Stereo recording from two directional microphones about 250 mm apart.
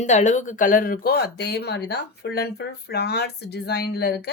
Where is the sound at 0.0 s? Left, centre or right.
Left.